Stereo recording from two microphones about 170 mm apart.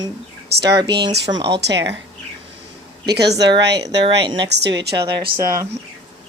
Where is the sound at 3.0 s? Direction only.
75° right (ahead or behind).